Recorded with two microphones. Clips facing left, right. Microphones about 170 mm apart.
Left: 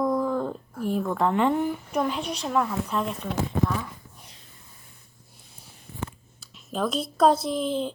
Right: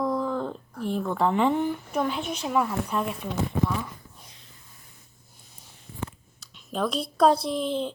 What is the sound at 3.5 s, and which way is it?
Speech, 65° left (ahead or behind).